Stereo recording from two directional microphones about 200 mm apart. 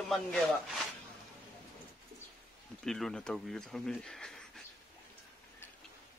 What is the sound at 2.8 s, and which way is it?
Speech, centre (ahead or behind).